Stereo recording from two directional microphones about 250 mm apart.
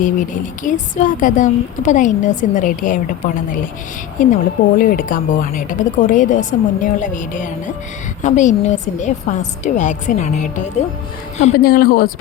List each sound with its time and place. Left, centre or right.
0.0 s a woman's voice: left